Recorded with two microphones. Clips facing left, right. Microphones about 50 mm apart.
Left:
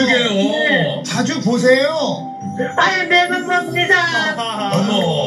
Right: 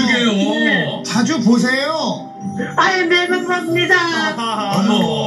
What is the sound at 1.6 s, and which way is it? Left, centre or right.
Speech, left.